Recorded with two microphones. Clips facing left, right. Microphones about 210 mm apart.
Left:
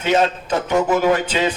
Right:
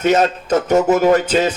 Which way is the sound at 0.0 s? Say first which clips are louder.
Right 3 dB; 45° right (ahead or behind).